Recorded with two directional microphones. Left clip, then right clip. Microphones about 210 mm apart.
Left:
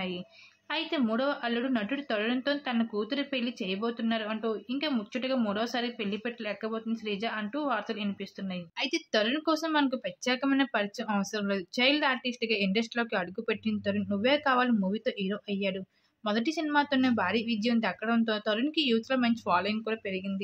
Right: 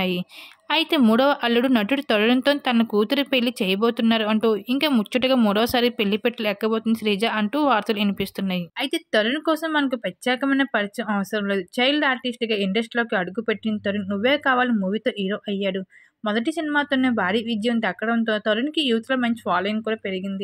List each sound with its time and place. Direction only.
0.7 s a woman's voice: 55° right (ahead or behind)
8.8 s speech: 25° right (ahead or behind)